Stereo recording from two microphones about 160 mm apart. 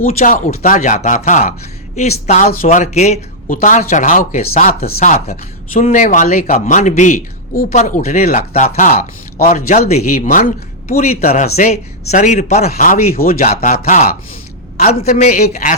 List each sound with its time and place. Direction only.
0.0 s speech: 60° left (ahead or behind)
4.9 s speech: 45° left (ahead or behind); by 9.9 s 60° left (ahead or behind)
9.9 s speech: 50° left (ahead or behind)
11.0 s speech: 45° left (ahead or behind)
13.1 s speech: 65° left (ahead or behind)
13.5 s speech: 50° left (ahead or behind)